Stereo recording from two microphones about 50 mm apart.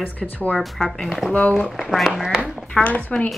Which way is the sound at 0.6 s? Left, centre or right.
Centre.